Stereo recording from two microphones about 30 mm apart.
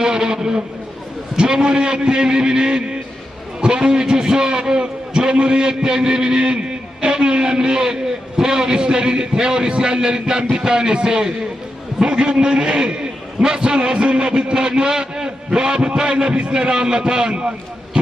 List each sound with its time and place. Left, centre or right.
0.0 s a man's voice: right